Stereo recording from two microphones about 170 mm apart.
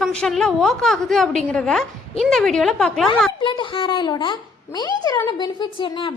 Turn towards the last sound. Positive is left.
turn(degrees=30)  # may be behind; listen again after turning